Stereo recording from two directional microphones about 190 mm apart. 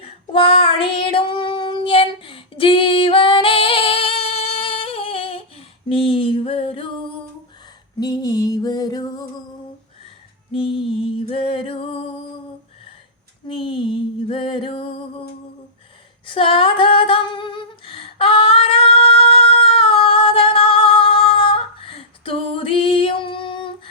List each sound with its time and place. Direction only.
0.0 s child singing: 30° left (ahead or behind)
5.9 s a sound: 30° left (ahead or behind)
7.9 s music: 20° left (ahead or behind)
10.5 s music: 25° left (ahead or behind)
13.5 s music: 25° left (ahead or behind)
16.2 s a sound: 25° left (ahead or behind)